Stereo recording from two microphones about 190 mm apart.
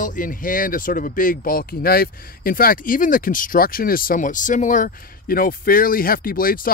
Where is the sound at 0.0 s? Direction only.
45° left (ahead or behind).